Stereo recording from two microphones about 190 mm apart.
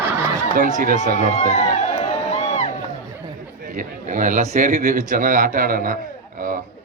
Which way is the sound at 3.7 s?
45° right (ahead or behind).